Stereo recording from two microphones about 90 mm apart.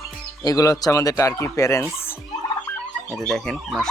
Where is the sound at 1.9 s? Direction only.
25° left (ahead or behind).